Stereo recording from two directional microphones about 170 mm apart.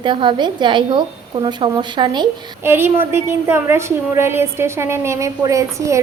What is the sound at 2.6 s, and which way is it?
A woman's voice, 15° right (ahead or behind).